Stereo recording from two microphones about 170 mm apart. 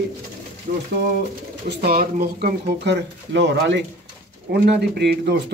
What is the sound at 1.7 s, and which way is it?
Speech, 65° right (ahead or behind).